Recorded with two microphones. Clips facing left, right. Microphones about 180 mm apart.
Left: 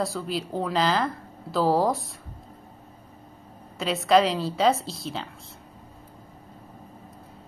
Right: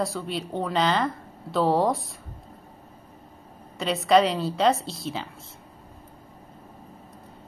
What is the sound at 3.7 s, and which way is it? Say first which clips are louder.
Speech: even; centre (ahead or behind).